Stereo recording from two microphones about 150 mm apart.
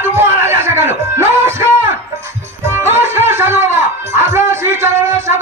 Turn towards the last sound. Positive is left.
turn(degrees=-15)  # may be behind; listen again after turning